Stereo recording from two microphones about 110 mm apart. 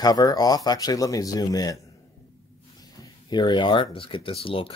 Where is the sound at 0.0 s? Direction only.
35° left (ahead or behind).